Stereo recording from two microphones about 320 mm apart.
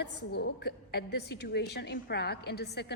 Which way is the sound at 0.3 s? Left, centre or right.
Left.